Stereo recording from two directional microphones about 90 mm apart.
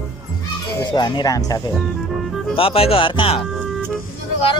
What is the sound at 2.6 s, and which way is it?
Speech, 90° left.